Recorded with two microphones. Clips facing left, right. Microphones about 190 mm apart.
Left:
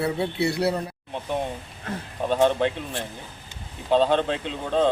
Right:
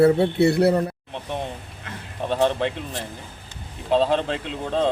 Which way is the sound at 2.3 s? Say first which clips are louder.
Left 1 dB; centre (ahead or behind).